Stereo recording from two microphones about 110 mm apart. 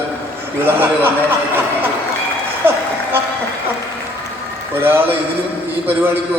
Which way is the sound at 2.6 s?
20° right (ahead or behind).